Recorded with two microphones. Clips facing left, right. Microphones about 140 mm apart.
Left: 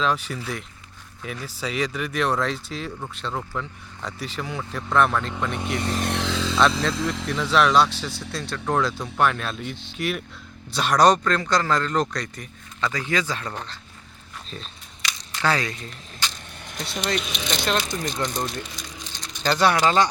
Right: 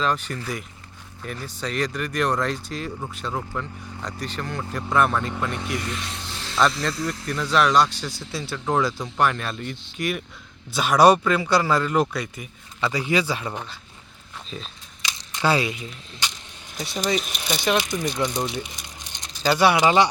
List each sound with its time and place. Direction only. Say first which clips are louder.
0.0 s speech: even; centre (ahead or behind)
6.0 s speech: left 10 dB; 70° left (ahead or behind)
6.6 s speech: even; centre (ahead or behind)
7.1 s speech: left 2 dB; 90° left
7.3 s speech: even; centre (ahead or behind)
15.0 s speech: right 1 dB; 15° right (ahead or behind)